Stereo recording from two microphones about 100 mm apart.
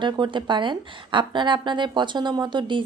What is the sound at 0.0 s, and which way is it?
A woman's voice, 50° right (ahead or behind).